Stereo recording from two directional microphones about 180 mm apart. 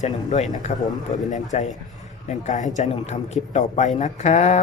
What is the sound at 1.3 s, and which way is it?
A man's voice, 40° left (ahead or behind).